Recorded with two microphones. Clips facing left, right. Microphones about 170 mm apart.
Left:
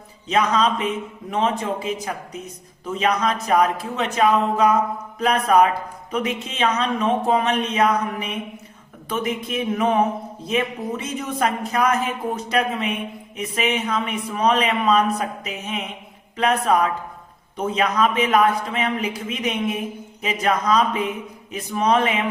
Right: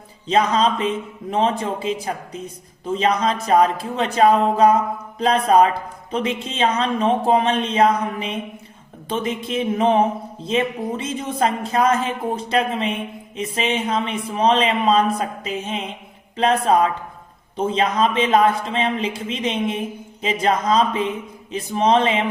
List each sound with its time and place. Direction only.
0.3 s a man's voice: 30° right (ahead or behind)